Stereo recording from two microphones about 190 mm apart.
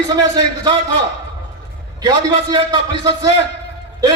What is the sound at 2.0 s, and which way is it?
A man's voice, 20° right (ahead or behind).